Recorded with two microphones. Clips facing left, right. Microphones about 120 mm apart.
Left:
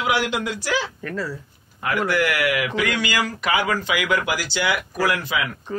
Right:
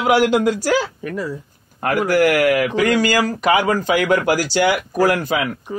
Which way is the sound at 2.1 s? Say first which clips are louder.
Right 8 dB; 45° right (ahead or behind).